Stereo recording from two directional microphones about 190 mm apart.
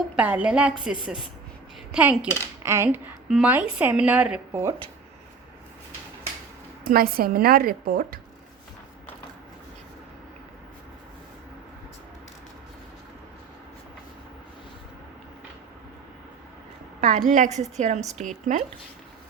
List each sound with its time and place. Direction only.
0.2 s a woman's voice: 5° right (ahead or behind)
6.8 s a woman's voice: 50° right (ahead or behind)
17.0 s a woman's voice: 40° right (ahead or behind)